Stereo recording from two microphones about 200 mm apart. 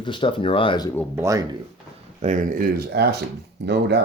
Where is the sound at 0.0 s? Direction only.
25° left (ahead or behind).